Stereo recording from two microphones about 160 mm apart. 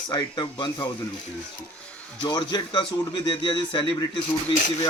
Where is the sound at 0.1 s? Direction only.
25° left (ahead or behind).